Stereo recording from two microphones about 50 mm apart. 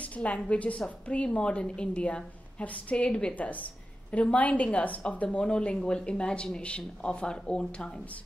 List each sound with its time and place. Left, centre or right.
0.0 s a woman's voice: left
3.3 s a woman's voice: left